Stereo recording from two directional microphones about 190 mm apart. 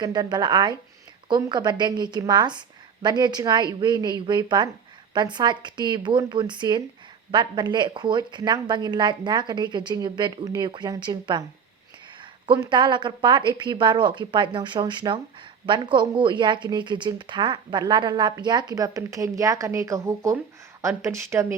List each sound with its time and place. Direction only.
0.0 s a woman's voice: 20° right (ahead or behind)